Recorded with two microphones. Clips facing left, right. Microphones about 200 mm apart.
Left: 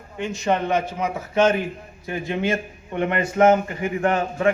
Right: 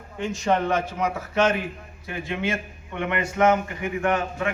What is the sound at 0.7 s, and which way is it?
Speech, 20° left (ahead or behind).